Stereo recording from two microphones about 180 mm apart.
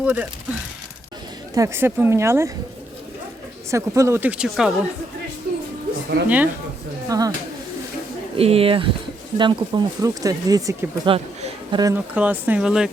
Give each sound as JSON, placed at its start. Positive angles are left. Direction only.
{"t": 0.0, "sound": "speech", "side_deg": -10}
{"t": 1.5, "sound": "speech", "side_deg": -15}
{"t": 3.7, "sound": "speech", "side_deg": -15}
{"t": 6.2, "sound": "speech", "side_deg": -10}
{"t": 7.1, "sound": "speech", "side_deg": -20}
{"t": 8.4, "sound": "speech", "side_deg": -35}
{"t": 12.1, "sound": "speech", "side_deg": -10}